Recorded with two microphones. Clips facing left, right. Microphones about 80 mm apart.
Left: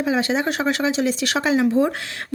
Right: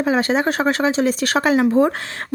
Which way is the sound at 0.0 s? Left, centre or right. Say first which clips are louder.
Right 3 dB; right.